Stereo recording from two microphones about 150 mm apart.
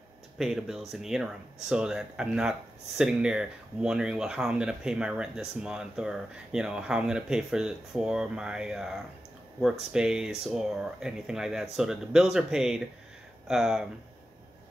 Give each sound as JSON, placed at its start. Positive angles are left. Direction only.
{"t": 0.4, "sound": "speech", "side_deg": -5}